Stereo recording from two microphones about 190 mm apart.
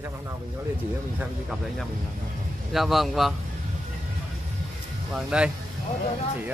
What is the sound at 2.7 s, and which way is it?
Speech, centre (ahead or behind).